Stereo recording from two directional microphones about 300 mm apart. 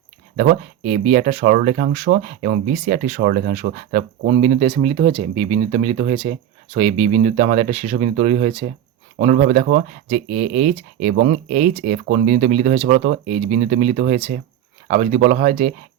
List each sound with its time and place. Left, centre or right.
0.3 s speech: right